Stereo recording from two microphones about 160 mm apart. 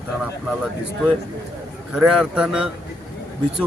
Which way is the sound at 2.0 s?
5° right (ahead or behind).